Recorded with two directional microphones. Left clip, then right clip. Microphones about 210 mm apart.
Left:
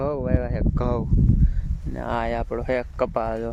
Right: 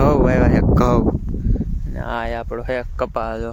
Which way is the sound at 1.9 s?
10° right (ahead or behind).